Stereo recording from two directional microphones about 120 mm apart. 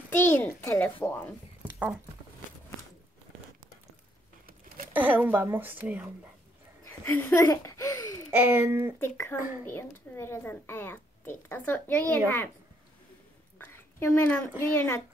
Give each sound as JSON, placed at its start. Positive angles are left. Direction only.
{"t": 0.1, "sound": "a sound", "side_deg": 20}
{"t": 1.6, "sound": "a sound", "side_deg": -10}
{"t": 4.9, "sound": "speech", "side_deg": -15}
{"t": 7.1, "sound": "speech", "side_deg": 20}
{"t": 8.3, "sound": "speech", "side_deg": -20}
{"t": 9.0, "sound": "speech", "side_deg": 20}
{"t": 13.7, "sound": "a woman's voice", "side_deg": 20}